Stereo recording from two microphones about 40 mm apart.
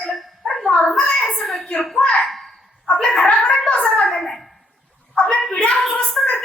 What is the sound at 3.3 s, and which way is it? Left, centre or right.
Gargling, left.